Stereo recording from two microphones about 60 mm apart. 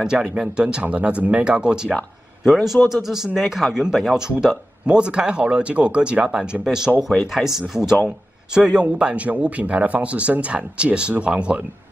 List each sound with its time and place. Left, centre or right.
0.0 s speech: centre
2.4 s speech: centre